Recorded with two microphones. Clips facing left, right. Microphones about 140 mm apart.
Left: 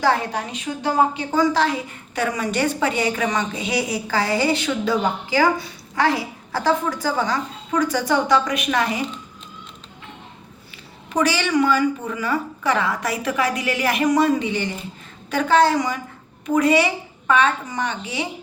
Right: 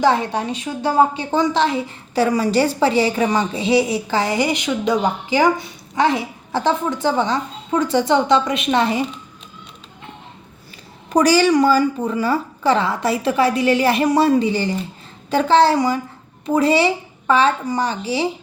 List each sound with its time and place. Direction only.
0.0 s a woman's voice: 20° right (ahead or behind)
11.1 s a woman's voice: 40° right (ahead or behind)